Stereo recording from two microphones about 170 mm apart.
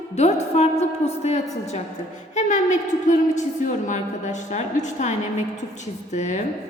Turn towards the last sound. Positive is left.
turn(degrees=45)  # may be behind; listen again after turning